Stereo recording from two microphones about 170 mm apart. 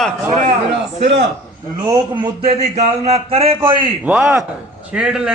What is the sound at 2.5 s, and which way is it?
A man's voice, 40° right (ahead or behind).